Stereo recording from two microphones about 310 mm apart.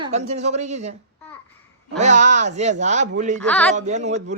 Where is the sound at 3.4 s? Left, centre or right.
Centre.